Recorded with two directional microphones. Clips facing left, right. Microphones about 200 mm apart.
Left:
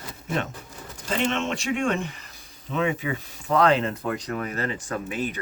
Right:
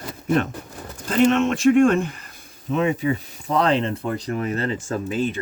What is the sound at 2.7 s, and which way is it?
Speech, 40° right (ahead or behind).